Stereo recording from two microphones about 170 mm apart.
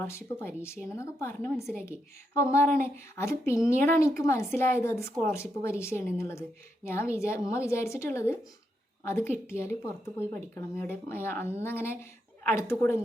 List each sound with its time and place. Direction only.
0.0 s speech: 15° left (ahead or behind)